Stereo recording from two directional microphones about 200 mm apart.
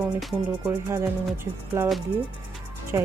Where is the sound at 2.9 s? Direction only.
15° right (ahead or behind).